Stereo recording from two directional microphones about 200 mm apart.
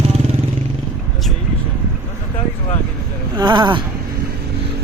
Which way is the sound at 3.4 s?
20° right (ahead or behind).